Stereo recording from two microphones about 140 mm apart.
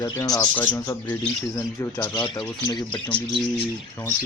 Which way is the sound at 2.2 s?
30° left (ahead or behind).